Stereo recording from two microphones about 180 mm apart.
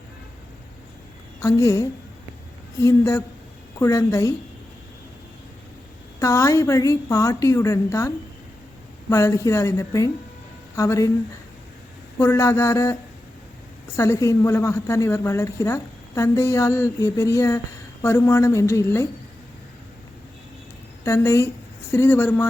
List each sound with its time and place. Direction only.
1.4 s a woman's voice: 15° left (ahead or behind)
6.1 s a woman's voice: 15° left (ahead or behind)
12.2 s a woman's voice: 15° left (ahead or behind)
21.0 s a woman's voice: 15° left (ahead or behind)